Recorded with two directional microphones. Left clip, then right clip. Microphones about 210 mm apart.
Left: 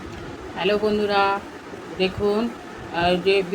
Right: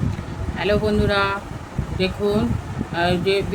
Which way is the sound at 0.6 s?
15° right (ahead or behind).